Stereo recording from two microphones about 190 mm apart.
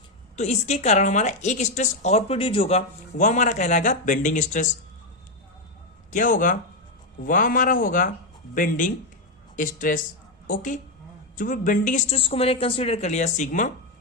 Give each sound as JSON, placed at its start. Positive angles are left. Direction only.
{"t": 0.3, "sound": "speech", "side_deg": 35}
{"t": 6.1, "sound": "a man's voice", "side_deg": 45}